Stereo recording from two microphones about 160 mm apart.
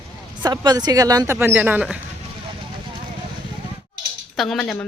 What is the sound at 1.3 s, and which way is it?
Speech, 10° right (ahead or behind).